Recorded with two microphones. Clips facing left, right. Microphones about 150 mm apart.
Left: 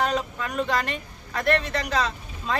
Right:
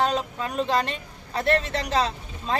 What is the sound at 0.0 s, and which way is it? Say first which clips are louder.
Speech: right 1 dB; 30° right (ahead or behind).